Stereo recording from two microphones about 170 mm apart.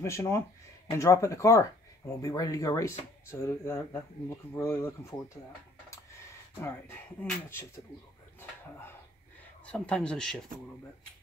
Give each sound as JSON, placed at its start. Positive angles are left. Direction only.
{"t": 0.0, "sound": "speech", "side_deg": 15}
{"t": 6.6, "sound": "speech", "side_deg": 10}
{"t": 8.4, "sound": "a sound", "side_deg": 15}
{"t": 9.7, "sound": "speech", "side_deg": 5}